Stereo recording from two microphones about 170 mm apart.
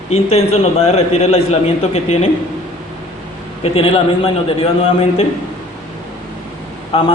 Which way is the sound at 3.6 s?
35° left (ahead or behind).